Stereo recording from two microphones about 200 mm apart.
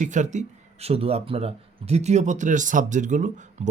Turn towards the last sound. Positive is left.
turn(degrees=-40)  # may be behind; listen again after turning